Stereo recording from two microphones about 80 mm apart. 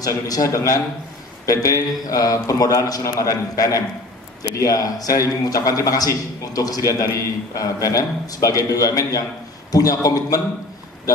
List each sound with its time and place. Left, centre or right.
0.0 s a man's voice: left